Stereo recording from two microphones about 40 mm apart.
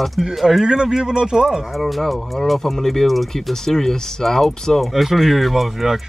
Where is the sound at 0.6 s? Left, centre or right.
Centre.